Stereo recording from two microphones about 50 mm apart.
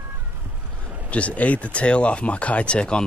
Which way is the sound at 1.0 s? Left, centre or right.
Left.